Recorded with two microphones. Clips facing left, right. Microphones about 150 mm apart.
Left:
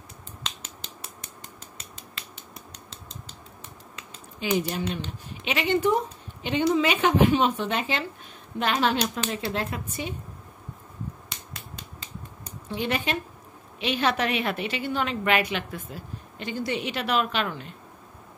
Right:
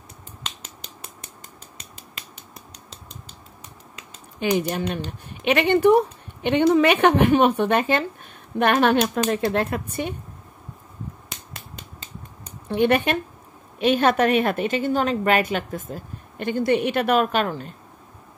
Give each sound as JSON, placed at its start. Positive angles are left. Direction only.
{"t": 4.4, "sound": "speech", "side_deg": -55}
{"t": 12.6, "sound": "a woman's voice", "side_deg": -55}